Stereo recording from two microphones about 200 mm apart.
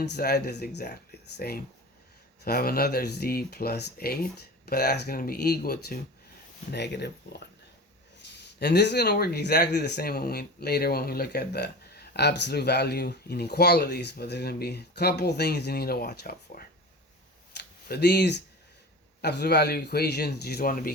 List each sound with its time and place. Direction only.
0.0 s speech: 55° left (ahead or behind)